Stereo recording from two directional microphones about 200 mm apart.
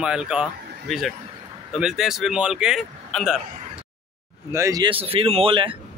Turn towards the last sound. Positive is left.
turn(degrees=-25)  # may be behind; listen again after turning